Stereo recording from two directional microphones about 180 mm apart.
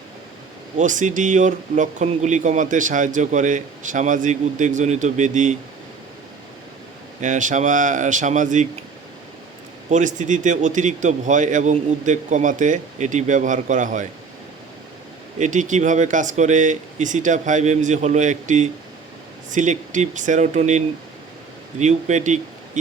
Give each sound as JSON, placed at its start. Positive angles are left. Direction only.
{"t": 0.8, "sound": "speech", "side_deg": -45}
{"t": 7.2, "sound": "speech", "side_deg": -45}
{"t": 9.9, "sound": "speech", "side_deg": -45}
{"t": 15.4, "sound": "speech", "side_deg": -45}